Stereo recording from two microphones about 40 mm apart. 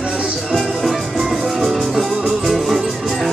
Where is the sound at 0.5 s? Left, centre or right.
Centre.